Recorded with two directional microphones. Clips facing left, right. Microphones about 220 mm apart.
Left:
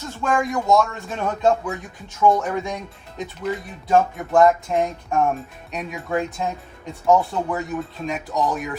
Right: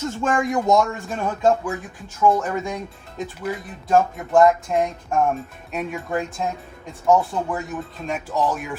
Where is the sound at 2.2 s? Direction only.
5° right (ahead or behind).